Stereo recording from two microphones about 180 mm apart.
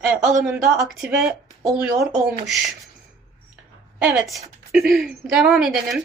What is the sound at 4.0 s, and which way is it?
A woman's voice, 5° right (ahead or behind).